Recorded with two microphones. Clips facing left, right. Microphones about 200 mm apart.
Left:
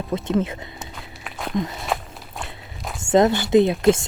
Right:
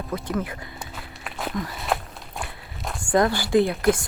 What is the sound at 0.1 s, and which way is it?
Speech, 25° left (ahead or behind).